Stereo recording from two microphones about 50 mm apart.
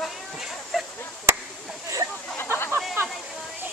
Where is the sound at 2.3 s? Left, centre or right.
Left.